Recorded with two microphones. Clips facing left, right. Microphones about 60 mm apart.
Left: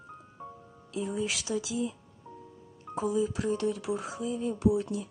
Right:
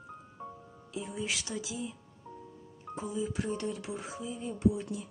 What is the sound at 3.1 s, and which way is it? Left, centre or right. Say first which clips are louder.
Speech: left 6 dB; left.